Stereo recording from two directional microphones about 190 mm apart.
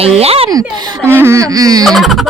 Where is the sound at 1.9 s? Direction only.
Centre (ahead or behind).